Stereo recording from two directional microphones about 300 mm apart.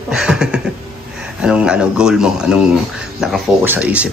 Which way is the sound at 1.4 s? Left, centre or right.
Centre.